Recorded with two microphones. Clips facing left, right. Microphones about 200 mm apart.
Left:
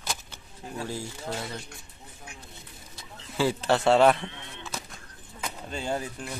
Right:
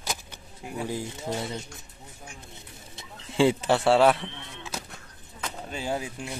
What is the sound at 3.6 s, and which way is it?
Speech, 10° right (ahead or behind).